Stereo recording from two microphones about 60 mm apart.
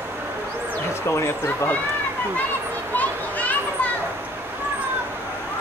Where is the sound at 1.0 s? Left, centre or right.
Left.